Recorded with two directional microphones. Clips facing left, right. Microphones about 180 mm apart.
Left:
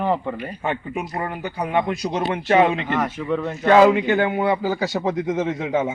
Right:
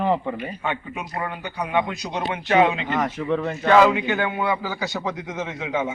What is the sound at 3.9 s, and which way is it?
Speech, 40° left (ahead or behind).